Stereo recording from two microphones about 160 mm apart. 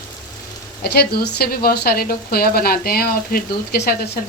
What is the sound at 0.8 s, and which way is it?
A woman's voice, 80° left.